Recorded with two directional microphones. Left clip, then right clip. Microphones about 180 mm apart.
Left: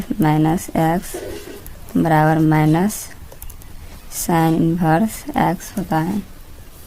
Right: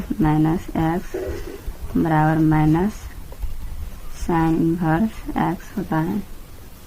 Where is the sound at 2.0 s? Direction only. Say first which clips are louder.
Left 4 dB; 55° left (ahead or behind).